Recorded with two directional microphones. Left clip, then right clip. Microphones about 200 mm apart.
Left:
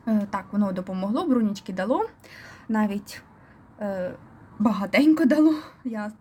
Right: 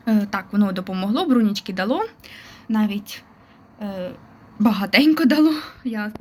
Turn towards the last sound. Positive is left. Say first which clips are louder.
# right 5 dB
turn(degrees=5)  # may be behind; listen again after turning